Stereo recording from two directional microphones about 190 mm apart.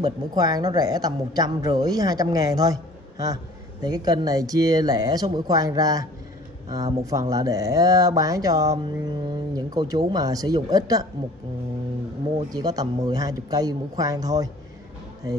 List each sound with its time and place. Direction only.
0.0 s speech: 20° right (ahead or behind)
7.1 s speech: 20° right (ahead or behind)
12.4 s speech: 20° right (ahead or behind)